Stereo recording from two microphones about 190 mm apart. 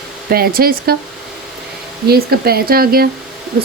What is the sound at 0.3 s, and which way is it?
Speech, 55° right (ahead or behind).